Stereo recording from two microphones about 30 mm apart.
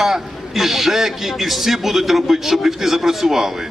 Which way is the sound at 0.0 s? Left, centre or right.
Centre.